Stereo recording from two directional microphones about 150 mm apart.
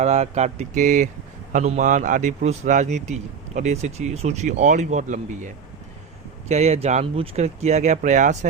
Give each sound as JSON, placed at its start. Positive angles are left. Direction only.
{"t": 0.0, "sound": "speech", "side_deg": -45}
{"t": 6.5, "sound": "speech", "side_deg": -45}